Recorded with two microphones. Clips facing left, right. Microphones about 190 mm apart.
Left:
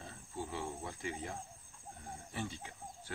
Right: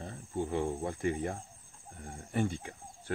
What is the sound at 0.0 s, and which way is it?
Cricket, 55° right (ahead or behind).